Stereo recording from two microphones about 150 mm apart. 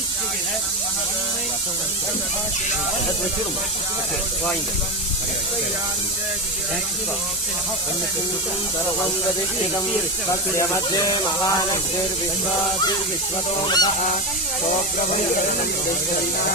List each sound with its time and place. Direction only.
10.6 s speech: 25° left (ahead or behind)
13.7 s speech: 25° left (ahead or behind)